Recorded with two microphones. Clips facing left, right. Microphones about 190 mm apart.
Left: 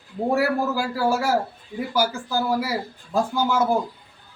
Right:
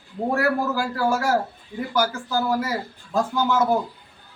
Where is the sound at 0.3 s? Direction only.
10° left (ahead or behind).